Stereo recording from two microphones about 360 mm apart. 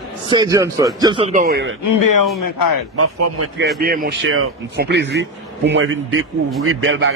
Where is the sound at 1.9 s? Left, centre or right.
Left.